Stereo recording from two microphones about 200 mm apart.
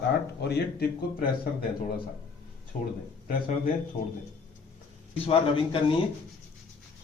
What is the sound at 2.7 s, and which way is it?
Speech, 40° left (ahead or behind).